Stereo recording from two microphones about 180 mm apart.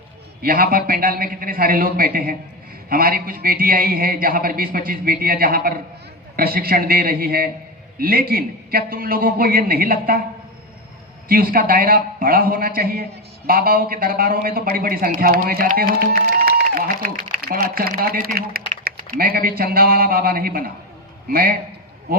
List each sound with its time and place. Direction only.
0.4 s a man's voice: 55° right (ahead or behind)
11.3 s a man's voice: 55° right (ahead or behind)